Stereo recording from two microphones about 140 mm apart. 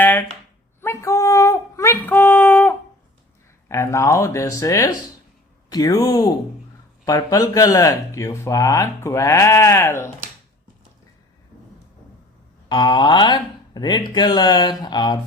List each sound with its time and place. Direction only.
0.0 s a sound: 15° left (ahead or behind)
3.7 s speech: 20° left (ahead or behind)
12.6 s speech: 30° left (ahead or behind)